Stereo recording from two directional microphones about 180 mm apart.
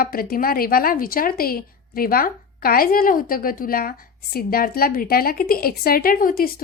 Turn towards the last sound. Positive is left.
turn(degrees=55)  # may be behind; listen again after turning